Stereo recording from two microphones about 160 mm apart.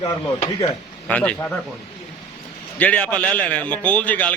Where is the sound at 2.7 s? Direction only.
10° left (ahead or behind).